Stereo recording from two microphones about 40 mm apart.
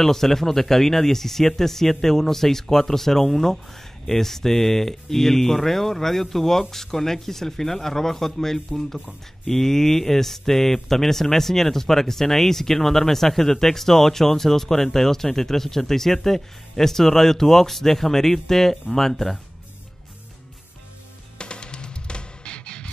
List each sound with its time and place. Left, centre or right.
0.0 s speech: centre
21.4 s music: left